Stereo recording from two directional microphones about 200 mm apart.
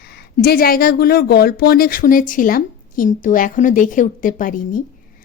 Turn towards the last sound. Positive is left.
turn(degrees=40)  # may be behind; listen again after turning